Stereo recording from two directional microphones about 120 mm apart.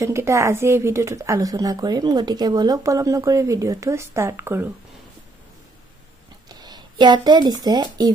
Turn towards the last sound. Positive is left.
turn(degrees=-35)  # may be behind; listen again after turning